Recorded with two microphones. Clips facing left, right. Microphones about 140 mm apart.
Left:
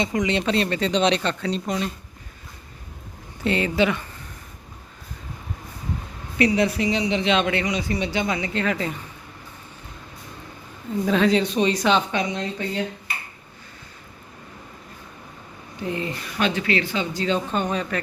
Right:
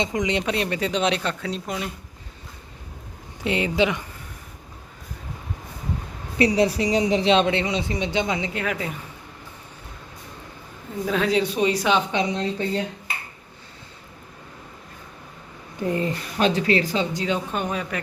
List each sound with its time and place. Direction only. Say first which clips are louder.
0.0 s speech: left 1 dB; 20° right (ahead or behind)
3.4 s speech: left 1 dB; 15° right (ahead or behind)
6.4 s speech: right 1 dB; 30° right (ahead or behind)
8.5 s speech: left 3 dB; 5° right (ahead or behind)
11.0 s speech: left 2 dB; 5° right (ahead or behind)
12.1 s speech: right 2 dB; 30° right (ahead or behind)
15.9 s speech: right 3 dB; 40° right (ahead or behind)
17.2 s speech: left 2 dB; 10° right (ahead or behind)